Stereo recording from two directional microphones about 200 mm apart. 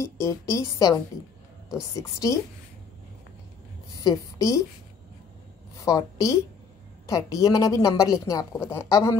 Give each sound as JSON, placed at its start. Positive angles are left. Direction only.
{"t": 0.0, "sound": "a woman's voice", "side_deg": 15}
{"t": 4.0, "sound": "a woman's voice", "side_deg": 15}
{"t": 5.9, "sound": "a woman's voice", "side_deg": 15}